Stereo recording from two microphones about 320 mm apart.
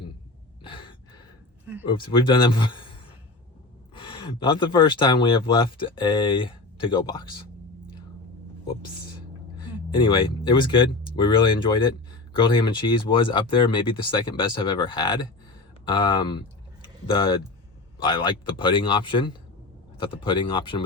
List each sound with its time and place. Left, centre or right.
0.7 s gasp: centre
1.9 s speech: centre
9.6 s speech: centre
16.8 s a sound: centre
18.0 s speech: centre